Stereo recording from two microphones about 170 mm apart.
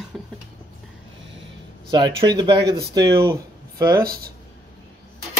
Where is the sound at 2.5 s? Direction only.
75° right (ahead or behind).